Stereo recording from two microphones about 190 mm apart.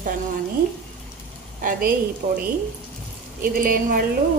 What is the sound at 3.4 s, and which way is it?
Speech, 50° right (ahead or behind).